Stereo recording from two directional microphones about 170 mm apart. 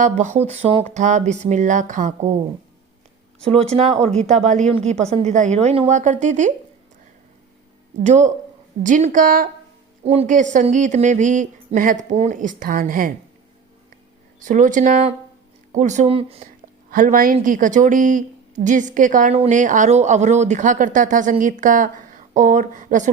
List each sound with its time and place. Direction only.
0.0 s speech: 45° right (ahead or behind)
3.4 s speech: 35° right (ahead or behind)
8.0 s speech: 45° right (ahead or behind)
10.0 s speech: 35° right (ahead or behind); by 13.1 s 55° right (ahead or behind)
14.4 s speech: 50° right (ahead or behind)
16.9 s speech: 55° right (ahead or behind)